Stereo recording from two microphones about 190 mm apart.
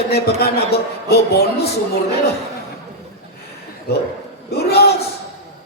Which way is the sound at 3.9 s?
55° left (ahead or behind).